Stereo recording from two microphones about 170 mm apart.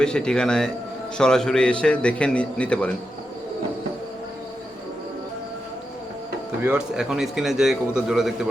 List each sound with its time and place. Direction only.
0.0 s a man's voice: 5° left (ahead or behind)
6.6 s a man's voice: 5° right (ahead or behind)